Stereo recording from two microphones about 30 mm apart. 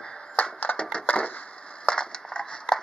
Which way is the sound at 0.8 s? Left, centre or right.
Left.